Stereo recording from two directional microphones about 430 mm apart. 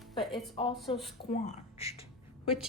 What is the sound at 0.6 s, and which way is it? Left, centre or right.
Speech, centre.